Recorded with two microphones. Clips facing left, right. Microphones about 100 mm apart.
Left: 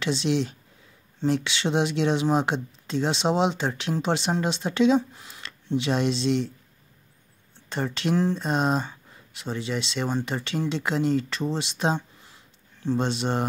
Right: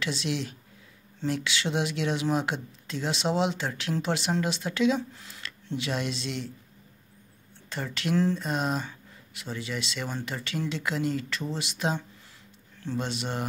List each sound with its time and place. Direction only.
0.0 s speech: 25° left (ahead or behind)
7.7 s speech: 25° left (ahead or behind)